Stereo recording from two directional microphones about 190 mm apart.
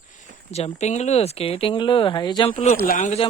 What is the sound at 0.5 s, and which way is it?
Speech, 35° left (ahead or behind).